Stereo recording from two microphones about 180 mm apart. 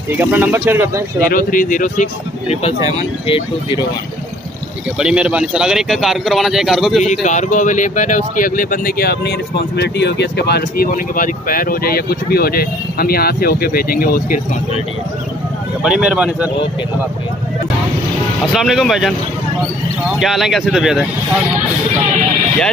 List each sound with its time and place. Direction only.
0.1 s speech: 10° right (ahead or behind)
1.3 s speech: 50° left (ahead or behind); by 3.8 s 30° left (ahead or behind)
4.9 s a man's voice: 5° right (ahead or behind)
7.2 s speech: 45° left (ahead or behind)
15.8 s a man's voice: 5° right (ahead or behind)
18.4 s a man's voice: centre (ahead or behind)
20.2 s a man's voice: centre (ahead or behind)